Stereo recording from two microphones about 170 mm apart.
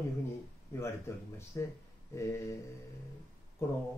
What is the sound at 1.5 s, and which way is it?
Speech, 20° left (ahead or behind).